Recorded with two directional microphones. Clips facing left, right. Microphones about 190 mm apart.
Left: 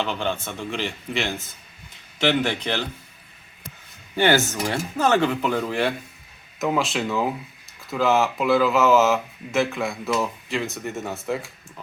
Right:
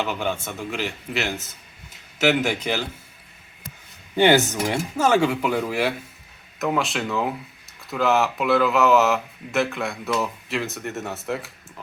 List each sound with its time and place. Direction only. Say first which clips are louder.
0.0 s speech: even; 10° right (ahead or behind)
4.1 s speech: right 3 dB; 15° right (ahead or behind)